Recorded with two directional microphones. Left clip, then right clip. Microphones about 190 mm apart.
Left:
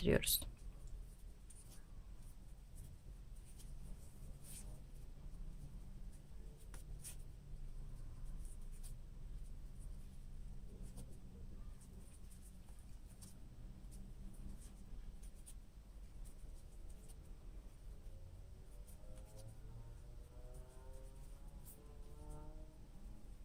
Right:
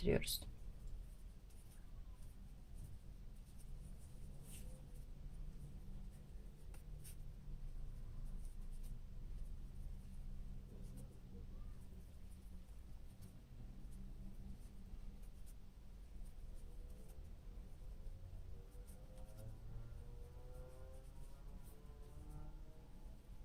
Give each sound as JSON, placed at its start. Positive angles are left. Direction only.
{"t": 0.0, "sound": "speech", "side_deg": 30}